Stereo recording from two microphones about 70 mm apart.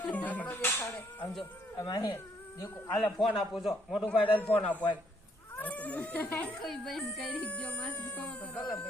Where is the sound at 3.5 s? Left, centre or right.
Centre.